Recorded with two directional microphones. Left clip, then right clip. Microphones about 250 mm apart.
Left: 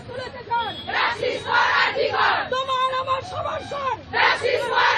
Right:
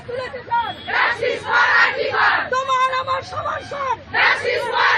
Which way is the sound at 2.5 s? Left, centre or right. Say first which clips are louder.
Right 4 dB; centre.